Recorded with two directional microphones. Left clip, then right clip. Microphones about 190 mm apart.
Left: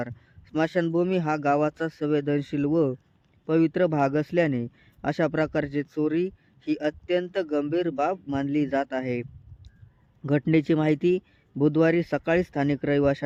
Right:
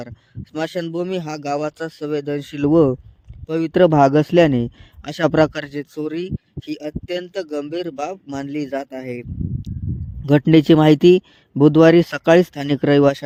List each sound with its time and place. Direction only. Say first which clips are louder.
0.5 s speech: right 1 dB; 45° right (ahead or behind)
10.4 s speech: right 11 dB; 45° right (ahead or behind)